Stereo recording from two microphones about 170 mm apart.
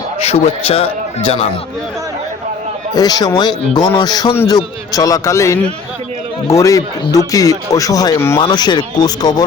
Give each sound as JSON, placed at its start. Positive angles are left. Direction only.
{"t": 0.2, "sound": "a man's voice", "side_deg": 35}
{"t": 2.9, "sound": "speech", "side_deg": 25}